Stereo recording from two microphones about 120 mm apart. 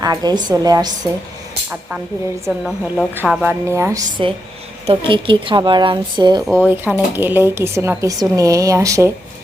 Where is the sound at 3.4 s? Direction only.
25° right (ahead or behind).